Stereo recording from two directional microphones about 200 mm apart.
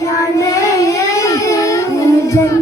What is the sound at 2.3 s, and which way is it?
Music, 15° left (ahead or behind).